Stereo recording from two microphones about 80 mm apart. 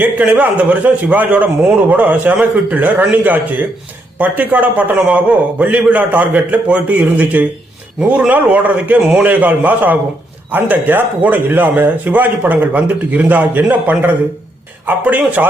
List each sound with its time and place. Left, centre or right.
0.0 s a man's voice: centre